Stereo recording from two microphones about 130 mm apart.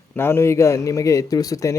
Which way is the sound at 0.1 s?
15° left (ahead or behind).